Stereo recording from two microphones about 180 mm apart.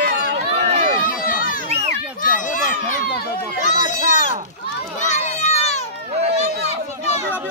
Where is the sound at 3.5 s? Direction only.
45° left (ahead or behind).